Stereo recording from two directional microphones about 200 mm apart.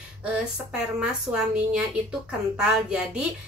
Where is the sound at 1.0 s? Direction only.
5° right (ahead or behind).